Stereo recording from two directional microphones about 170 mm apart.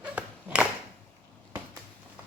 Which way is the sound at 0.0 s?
10° right (ahead or behind).